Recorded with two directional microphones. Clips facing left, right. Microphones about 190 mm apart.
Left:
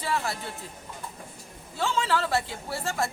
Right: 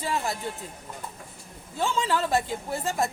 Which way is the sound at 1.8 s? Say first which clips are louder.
Right 1 dB; 15° right (ahead or behind).